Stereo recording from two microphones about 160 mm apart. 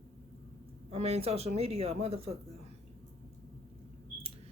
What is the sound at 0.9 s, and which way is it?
Speech, 40° right (ahead or behind).